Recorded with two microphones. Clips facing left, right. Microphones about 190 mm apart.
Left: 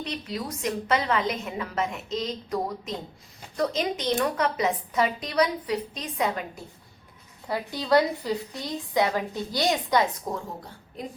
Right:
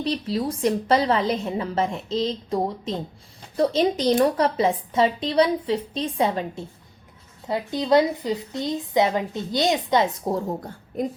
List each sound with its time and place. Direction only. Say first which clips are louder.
0.0 s a woman's voice: right 8 dB; 30° right (ahead or behind)
10.3 s a woman's voice: right 8 dB; 50° right (ahead or behind)